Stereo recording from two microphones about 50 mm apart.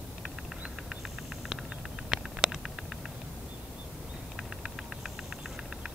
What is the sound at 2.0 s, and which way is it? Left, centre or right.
Vehicle, centre.